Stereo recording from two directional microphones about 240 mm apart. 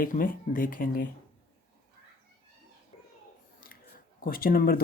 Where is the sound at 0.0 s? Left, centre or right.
Left.